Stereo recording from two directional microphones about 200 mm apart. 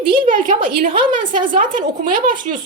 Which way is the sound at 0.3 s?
40° right (ahead or behind).